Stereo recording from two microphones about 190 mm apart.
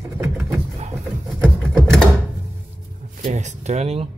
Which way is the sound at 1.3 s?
15° right (ahead or behind).